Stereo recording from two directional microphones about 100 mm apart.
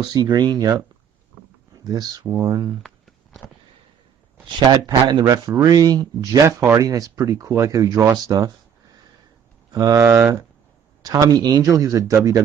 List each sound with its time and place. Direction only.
0.0 s speech: 45° right (ahead or behind)
1.9 s speech: 40° right (ahead or behind)
4.6 s speech: 40° right (ahead or behind)
9.7 s speech: 40° right (ahead or behind)
10.0 s speech: 20° right (ahead or behind)
11.0 s speech: 40° right (ahead or behind)